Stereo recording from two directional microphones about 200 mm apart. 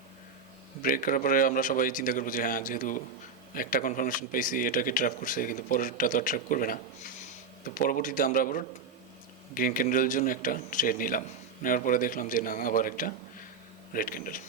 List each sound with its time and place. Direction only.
0.8 s speech: 45° left (ahead or behind)